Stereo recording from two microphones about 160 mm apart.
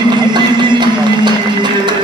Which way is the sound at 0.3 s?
30° right (ahead or behind).